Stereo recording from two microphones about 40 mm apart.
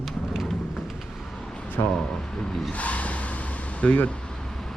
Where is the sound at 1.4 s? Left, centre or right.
Left.